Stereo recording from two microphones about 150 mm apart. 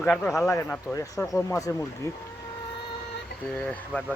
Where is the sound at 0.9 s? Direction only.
25° left (ahead or behind).